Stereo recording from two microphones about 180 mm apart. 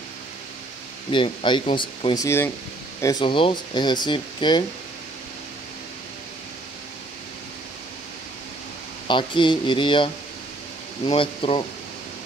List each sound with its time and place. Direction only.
1.1 s speech: 25° left (ahead or behind)
2.2 s speech: 15° left (ahead or behind)
9.0 s speech: 25° left (ahead or behind)